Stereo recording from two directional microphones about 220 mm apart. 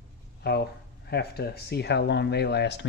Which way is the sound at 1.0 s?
45° left (ahead or behind).